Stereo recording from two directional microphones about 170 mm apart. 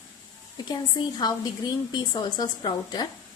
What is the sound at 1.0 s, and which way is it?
A woman's voice, 25° left (ahead or behind).